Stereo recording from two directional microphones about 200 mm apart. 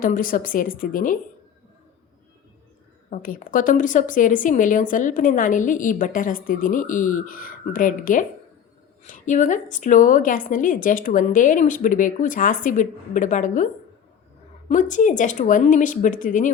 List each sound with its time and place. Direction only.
0.0 s a woman's voice: 45° left (ahead or behind)
3.1 s a woman's voice: 45° left (ahead or behind)
14.7 s a woman's voice: 40° left (ahead or behind)